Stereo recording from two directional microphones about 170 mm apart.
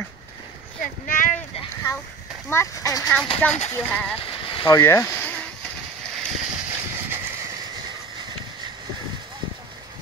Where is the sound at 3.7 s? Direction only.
5° left (ahead or behind).